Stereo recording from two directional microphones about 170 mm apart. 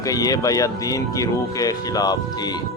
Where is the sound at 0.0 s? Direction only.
20° left (ahead or behind).